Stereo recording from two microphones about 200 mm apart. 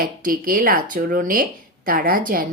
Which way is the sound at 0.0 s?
45° right (ahead or behind).